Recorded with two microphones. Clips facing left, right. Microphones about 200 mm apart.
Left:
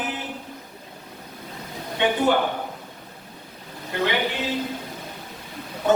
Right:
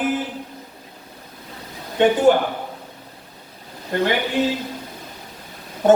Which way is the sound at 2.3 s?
45° right (ahead or behind).